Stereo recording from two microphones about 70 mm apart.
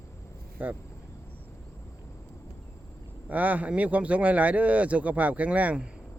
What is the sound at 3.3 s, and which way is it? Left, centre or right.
Speech, right.